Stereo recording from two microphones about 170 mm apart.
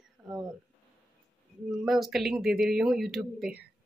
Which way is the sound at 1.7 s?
Centre (ahead or behind).